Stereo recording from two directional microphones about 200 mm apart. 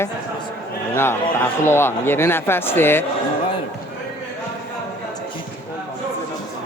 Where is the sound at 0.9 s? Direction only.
10° left (ahead or behind).